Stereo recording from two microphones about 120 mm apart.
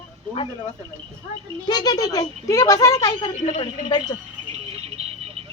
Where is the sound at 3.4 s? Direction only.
80° left.